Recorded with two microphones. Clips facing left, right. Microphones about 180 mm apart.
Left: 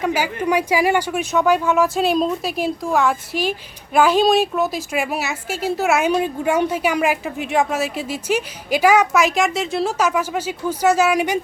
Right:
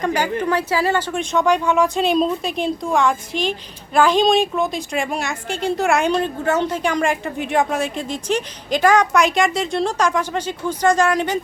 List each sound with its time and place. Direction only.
0.0 s a woman's voice: 5° left (ahead or behind)